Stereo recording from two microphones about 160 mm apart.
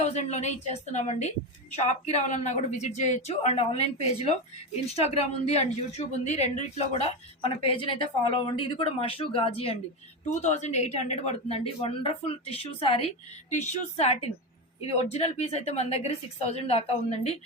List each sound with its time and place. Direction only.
0.0 s speech: 45° left (ahead or behind)
10.2 s speech: 45° left (ahead or behind)
13.5 s speech: 45° left (ahead or behind)